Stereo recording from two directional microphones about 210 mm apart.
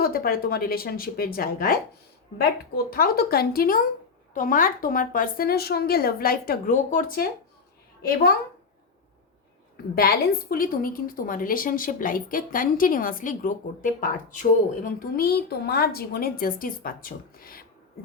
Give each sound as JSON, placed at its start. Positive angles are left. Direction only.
{"t": 0.0, "sound": "speech", "side_deg": 45}
{"t": 9.9, "sound": "a woman's voice", "side_deg": 45}